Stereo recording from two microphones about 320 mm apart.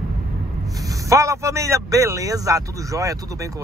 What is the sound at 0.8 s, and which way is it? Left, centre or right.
A man's voice, centre.